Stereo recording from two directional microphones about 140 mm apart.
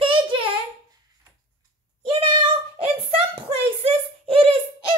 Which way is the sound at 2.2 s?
35° right (ahead or behind).